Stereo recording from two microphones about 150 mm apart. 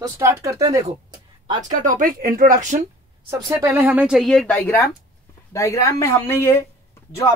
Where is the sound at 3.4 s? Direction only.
20° right (ahead or behind).